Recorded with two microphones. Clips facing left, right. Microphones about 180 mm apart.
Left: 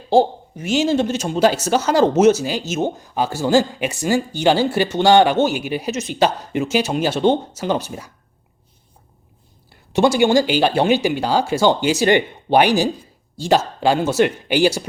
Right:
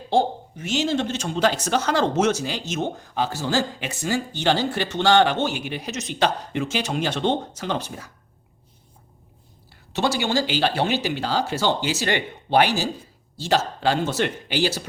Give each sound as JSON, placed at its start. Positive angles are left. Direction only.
{"t": 0.1, "sound": "a man's voice", "side_deg": 10}
{"t": 10.0, "sound": "speech", "side_deg": 50}
{"t": 10.3, "sound": "speech", "side_deg": 15}